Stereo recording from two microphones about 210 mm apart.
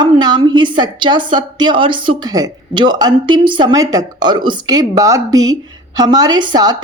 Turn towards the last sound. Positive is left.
turn(degrees=-20)  # may be behind; listen again after turning